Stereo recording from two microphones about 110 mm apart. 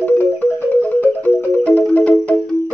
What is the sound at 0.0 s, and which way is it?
Music, 15° left (ahead or behind).